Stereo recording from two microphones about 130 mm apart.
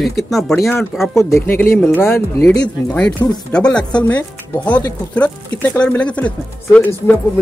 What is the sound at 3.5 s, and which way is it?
Speech, 5° left (ahead or behind).